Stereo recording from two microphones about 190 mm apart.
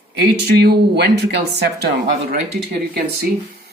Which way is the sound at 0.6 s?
60° right (ahead or behind).